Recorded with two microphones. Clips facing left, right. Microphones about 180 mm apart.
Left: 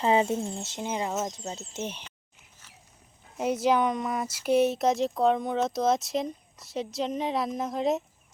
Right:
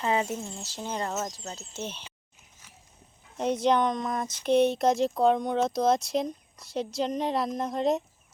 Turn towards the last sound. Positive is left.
turn(degrees=0)  # may be behind; listen again after turning